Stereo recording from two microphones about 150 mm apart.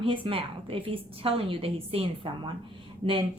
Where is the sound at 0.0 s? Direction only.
35° right (ahead or behind).